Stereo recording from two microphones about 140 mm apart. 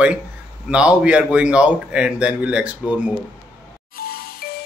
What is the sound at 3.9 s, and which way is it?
Music, 90° left.